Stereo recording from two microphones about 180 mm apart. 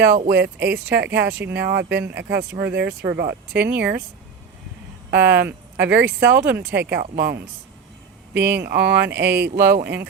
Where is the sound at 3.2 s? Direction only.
65° right (ahead or behind).